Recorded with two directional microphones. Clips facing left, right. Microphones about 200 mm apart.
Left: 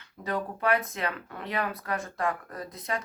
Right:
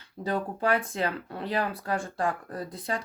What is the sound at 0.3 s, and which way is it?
Speech, 30° right (ahead or behind).